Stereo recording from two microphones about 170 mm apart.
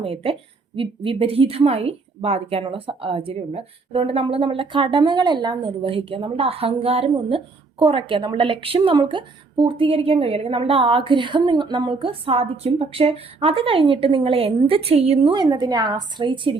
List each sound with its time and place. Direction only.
0.0 s a woman's voice: 35° right (ahead or behind)